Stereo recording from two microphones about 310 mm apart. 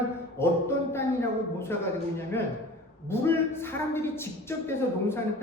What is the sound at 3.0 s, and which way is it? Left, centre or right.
Speech, centre.